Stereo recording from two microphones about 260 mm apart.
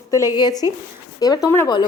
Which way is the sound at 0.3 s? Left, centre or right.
Centre.